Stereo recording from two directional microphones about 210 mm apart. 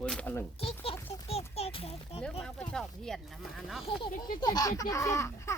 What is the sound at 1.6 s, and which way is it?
Speech, 30° left (ahead or behind).